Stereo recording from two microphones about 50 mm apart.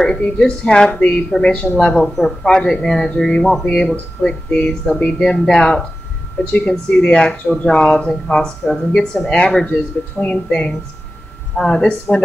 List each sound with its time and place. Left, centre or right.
0.4 s speech: centre
5.3 s speech: centre
6.7 s speech: centre